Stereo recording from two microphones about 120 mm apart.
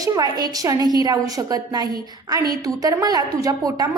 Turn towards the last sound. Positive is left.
turn(degrees=-35)  # may be behind; listen again after turning